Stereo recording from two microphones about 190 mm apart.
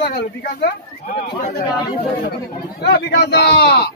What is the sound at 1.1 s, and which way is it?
Speech, 40° left (ahead or behind).